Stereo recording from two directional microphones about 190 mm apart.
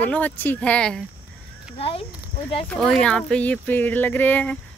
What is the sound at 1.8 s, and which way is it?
Speech, 30° left (ahead or behind).